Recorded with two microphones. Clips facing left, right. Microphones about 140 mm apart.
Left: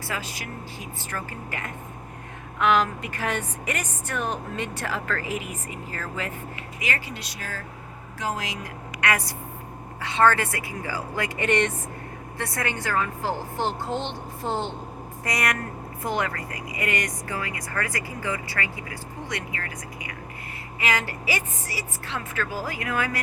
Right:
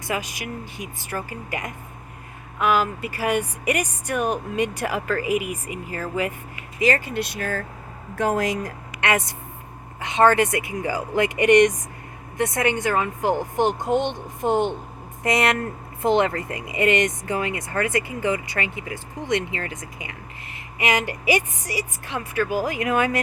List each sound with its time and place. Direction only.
0.1 s a woman's voice: 15° right (ahead or behind)
6.7 s speech: 35° right (ahead or behind)
7.0 s speech: 55° right (ahead or behind)
9.0 s a woman's voice: 25° right (ahead or behind)